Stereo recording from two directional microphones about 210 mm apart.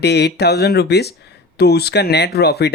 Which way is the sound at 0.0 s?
55° left (ahead or behind).